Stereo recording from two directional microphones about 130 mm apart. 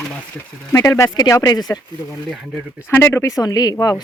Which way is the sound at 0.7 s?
25° left (ahead or behind).